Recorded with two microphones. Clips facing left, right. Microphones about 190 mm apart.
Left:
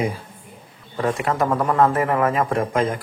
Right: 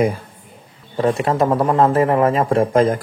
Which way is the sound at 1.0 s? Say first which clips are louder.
Right 4 dB; 30° right (ahead or behind).